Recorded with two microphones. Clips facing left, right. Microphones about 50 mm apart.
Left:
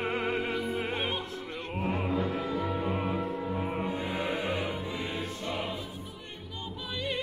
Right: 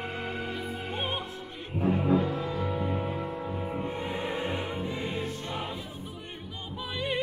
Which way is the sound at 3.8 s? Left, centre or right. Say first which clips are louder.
Left 1 dB; right.